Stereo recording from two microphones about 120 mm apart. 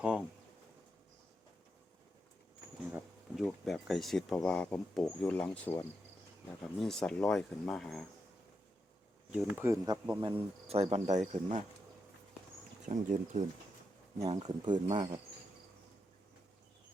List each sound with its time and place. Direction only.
0.0 s pigeon: 10° right (ahead or behind)
3.3 s speech: centre (ahead or behind)
9.6 s speech: 20° right (ahead or behind)
10.2 s speech: 45° right (ahead or behind); by 11.6 s 65° right (ahead or behind)
12.8 s speech: 90° right
14.2 s speech: 35° right (ahead or behind)